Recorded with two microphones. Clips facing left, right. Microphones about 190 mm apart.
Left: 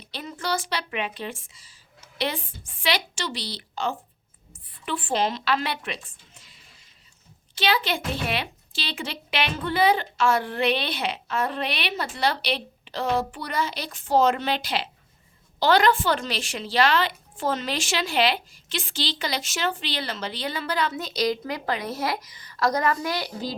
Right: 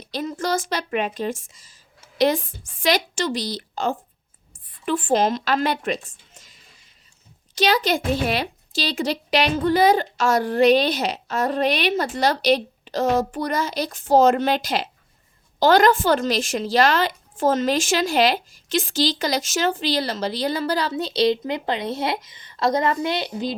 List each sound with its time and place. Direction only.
0.0 s a woman's voice: 40° right (ahead or behind); by 23.6 s 20° right (ahead or behind)